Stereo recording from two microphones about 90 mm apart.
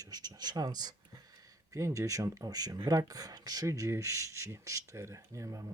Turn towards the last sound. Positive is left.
turn(degrees=-35)  # may be behind; listen again after turning